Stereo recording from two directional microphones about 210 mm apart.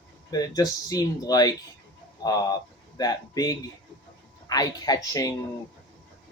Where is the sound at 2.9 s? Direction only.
20° left (ahead or behind).